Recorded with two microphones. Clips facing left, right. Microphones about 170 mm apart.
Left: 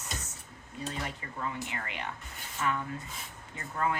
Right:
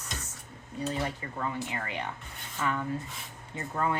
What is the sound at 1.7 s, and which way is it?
Speech, 30° right (ahead or behind).